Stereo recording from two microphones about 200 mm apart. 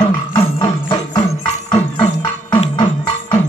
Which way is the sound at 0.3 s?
20° left (ahead or behind).